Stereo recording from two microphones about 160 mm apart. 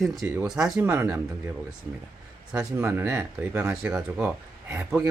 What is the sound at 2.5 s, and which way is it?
Speech, 10° right (ahead or behind).